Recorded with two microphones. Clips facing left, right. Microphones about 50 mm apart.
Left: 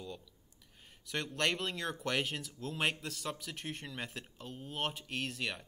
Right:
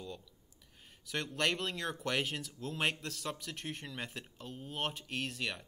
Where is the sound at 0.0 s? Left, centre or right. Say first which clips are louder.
Even; centre.